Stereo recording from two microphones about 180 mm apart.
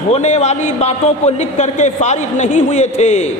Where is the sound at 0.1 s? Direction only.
40° left (ahead or behind).